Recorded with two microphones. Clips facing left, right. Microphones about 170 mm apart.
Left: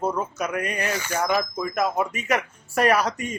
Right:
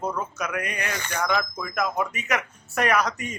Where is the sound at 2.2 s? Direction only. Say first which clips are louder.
Left 3 dB; 30° left (ahead or behind).